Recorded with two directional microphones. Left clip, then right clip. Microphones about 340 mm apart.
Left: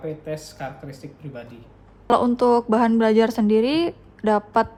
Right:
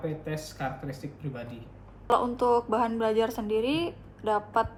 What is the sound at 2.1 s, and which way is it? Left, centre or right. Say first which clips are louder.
A woman's voice: left 6 dB; left.